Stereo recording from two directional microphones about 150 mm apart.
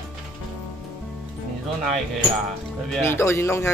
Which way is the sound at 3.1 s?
20° left (ahead or behind).